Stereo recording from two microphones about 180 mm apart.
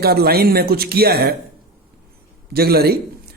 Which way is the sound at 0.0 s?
60° right (ahead or behind).